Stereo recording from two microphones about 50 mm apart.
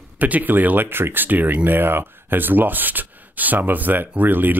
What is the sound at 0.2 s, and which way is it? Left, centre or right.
Speech, right.